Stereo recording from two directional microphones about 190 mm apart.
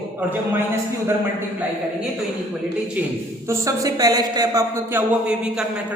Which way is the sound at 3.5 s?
15° right (ahead or behind).